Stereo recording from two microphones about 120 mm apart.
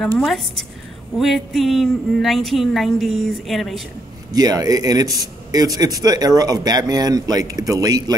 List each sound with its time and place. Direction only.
0.0 s a woman's voice: 5° left (ahead or behind)
4.3 s a man's voice: 30° right (ahead or behind)